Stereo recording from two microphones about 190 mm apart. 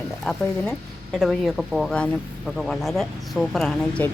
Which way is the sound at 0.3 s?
5° left (ahead or behind).